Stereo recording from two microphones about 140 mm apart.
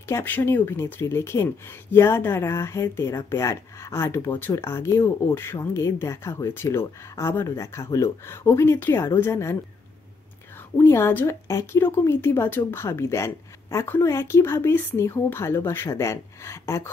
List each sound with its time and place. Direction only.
0.1 s speech: 15° left (ahead or behind)
10.8 s speech: 20° left (ahead or behind)